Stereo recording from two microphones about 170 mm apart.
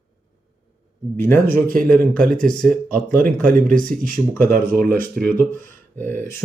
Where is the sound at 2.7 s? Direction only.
50° right (ahead or behind).